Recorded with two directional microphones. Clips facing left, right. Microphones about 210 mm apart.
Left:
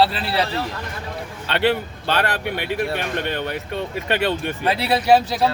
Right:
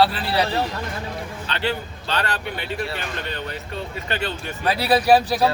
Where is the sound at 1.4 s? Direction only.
60° left (ahead or behind).